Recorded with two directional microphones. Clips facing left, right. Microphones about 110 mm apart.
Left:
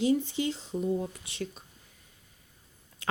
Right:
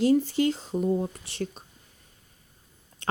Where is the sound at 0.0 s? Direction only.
45° right (ahead or behind).